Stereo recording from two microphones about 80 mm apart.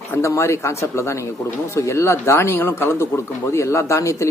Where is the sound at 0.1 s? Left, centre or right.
Left.